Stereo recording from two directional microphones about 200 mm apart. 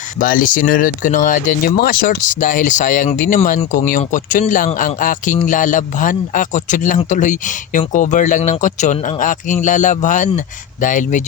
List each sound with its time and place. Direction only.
0.2 s speech: 40° left (ahead or behind)